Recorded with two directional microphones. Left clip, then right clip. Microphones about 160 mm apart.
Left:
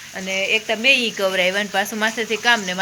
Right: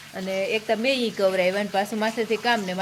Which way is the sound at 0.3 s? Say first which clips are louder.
Left 4 dB; 15° right (ahead or behind).